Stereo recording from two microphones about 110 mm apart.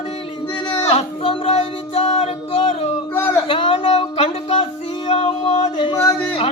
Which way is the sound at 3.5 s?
50° left (ahead or behind).